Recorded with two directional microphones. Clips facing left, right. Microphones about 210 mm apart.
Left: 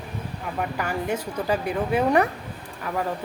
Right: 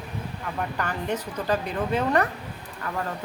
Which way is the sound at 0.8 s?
10° left (ahead or behind).